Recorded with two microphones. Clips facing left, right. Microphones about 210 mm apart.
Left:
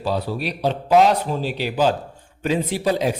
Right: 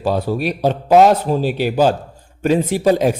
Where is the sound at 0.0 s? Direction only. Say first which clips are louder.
Right 5 dB; 50° right (ahead or behind).